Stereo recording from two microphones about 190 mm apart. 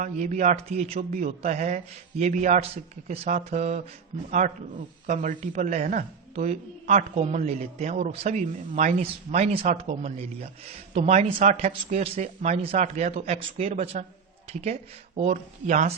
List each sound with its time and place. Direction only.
0.0 s a man's voice: 40° right (ahead or behind)